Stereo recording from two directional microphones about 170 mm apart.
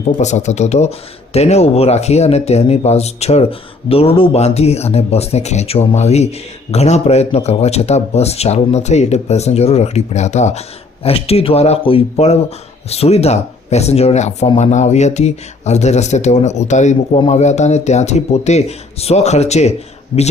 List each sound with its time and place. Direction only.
0.2 s speech: 45° left (ahead or behind)
20.1 s speech: 30° left (ahead or behind)